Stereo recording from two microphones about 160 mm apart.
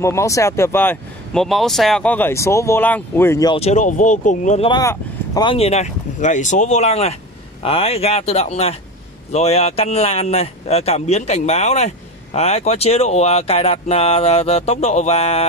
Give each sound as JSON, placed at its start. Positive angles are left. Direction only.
{"t": 0.0, "sound": "speech", "side_deg": 20}
{"t": 1.4, "sound": "speech", "side_deg": 0}
{"t": 3.5, "sound": "speech", "side_deg": 45}
{"t": 4.6, "sound": "speech", "side_deg": 25}